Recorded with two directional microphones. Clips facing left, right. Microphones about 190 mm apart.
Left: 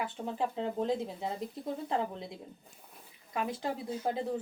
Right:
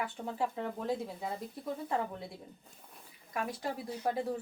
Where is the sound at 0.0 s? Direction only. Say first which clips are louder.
Left 1 dB; 20° left (ahead or behind).